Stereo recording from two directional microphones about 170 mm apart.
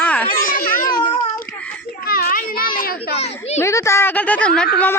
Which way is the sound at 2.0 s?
60° left (ahead or behind).